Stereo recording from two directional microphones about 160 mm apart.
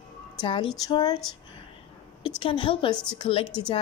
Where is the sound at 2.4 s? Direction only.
30° left (ahead or behind).